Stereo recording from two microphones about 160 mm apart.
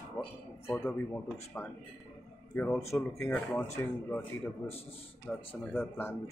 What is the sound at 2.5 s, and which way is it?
Speech, 10° left (ahead or behind).